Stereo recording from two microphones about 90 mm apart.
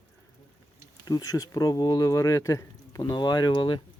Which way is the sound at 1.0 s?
40° left (ahead or behind).